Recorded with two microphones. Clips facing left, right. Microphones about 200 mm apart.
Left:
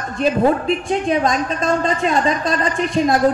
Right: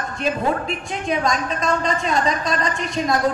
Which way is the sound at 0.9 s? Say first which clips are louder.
Left 3 dB; 35° left (ahead or behind).